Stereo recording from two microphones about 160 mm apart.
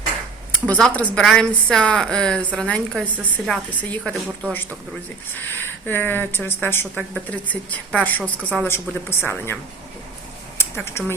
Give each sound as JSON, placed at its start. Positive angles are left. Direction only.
{"t": 0.7, "sound": "a woman's voice", "side_deg": 5}
{"t": 5.3, "sound": "speech", "side_deg": 15}
{"t": 10.6, "sound": "a sound", "side_deg": 15}